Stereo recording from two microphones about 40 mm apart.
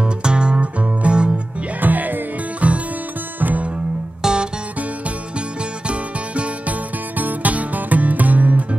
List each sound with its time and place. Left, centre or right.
0.0 s music: right
1.8 s music: right
4.2 s music: right
5.9 s music: right
7.2 s music: right